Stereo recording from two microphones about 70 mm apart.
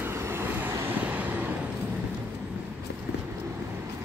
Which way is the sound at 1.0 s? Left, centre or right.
Right.